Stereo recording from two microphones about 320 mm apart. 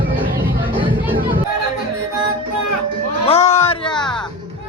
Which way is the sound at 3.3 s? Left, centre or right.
Centre.